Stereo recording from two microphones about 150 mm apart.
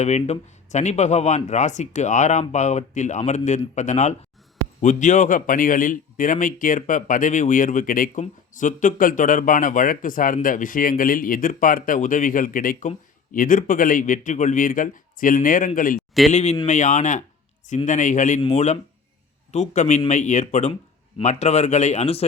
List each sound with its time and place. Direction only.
0.0 s speech: 50° left (ahead or behind); by 16.0 s 65° left (ahead or behind)
16.3 s speech: 50° left (ahead or behind)